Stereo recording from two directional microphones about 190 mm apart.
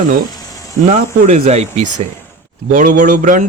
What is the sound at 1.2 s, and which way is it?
A man's voice, 35° right (ahead or behind).